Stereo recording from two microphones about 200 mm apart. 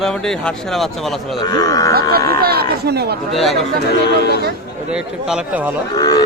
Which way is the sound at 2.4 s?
50° right (ahead or behind).